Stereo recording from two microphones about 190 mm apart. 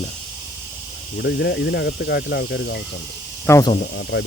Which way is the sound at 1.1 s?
65° left (ahead or behind).